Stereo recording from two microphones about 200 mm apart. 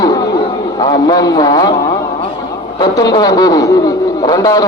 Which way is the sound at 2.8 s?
20° left (ahead or behind).